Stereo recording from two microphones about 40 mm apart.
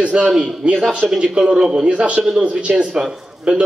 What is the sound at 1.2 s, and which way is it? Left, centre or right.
A man's voice, right.